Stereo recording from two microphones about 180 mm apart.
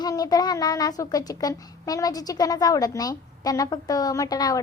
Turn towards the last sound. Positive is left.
turn(degrees=20)  # may be behind; listen again after turning